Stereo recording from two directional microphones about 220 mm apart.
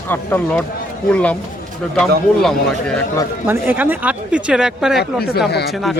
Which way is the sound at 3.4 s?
10° right (ahead or behind).